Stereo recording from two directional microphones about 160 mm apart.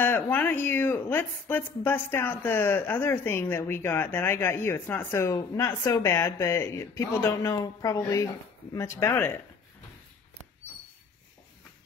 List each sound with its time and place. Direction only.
0.0 s speech: 10° left (ahead or behind)